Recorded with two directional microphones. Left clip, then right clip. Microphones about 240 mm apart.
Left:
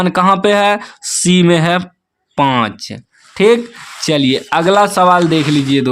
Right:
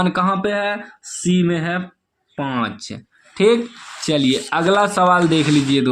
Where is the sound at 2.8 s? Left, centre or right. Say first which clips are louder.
Left 5 dB; left.